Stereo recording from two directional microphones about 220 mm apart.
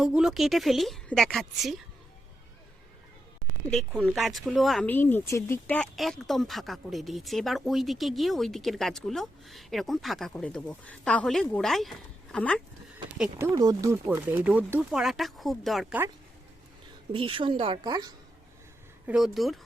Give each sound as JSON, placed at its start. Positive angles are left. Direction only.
{"t": 0.0, "sound": "speech", "side_deg": 0}
{"t": 3.7, "sound": "speech", "side_deg": 0}
{"t": 13.5, "sound": "speech", "side_deg": -15}
{"t": 17.1, "sound": "a woman's voice", "side_deg": -25}
{"t": 19.0, "sound": "speech", "side_deg": 0}